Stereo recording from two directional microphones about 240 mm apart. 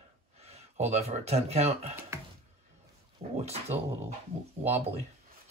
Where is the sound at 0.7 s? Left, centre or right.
Right.